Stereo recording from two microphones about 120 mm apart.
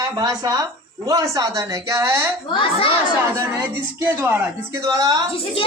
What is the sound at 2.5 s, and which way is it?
Speech, 45° left (ahead or behind).